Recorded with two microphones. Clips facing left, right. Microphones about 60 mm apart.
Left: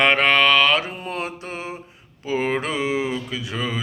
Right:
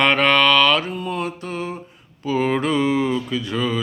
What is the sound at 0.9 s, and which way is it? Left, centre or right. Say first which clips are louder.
Mantra: right 3 dB; left.